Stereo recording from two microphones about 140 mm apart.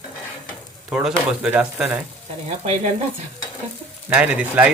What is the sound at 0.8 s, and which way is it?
Speech, 10° right (ahead or behind).